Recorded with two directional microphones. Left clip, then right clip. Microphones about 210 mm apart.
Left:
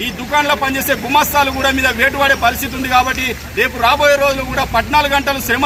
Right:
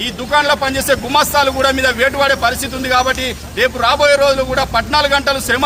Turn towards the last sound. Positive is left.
turn(degrees=-15)  # may be behind; listen again after turning